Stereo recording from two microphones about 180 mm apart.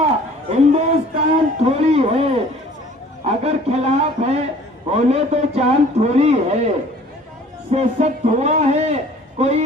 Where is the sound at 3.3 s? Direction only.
35° right (ahead or behind).